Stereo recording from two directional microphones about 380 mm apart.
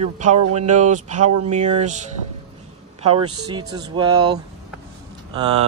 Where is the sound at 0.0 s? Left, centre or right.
Centre.